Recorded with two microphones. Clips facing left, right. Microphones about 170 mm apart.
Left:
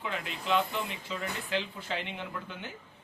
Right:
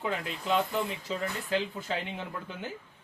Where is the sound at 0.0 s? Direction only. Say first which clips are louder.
Right 3 dB; 40° right (ahead or behind).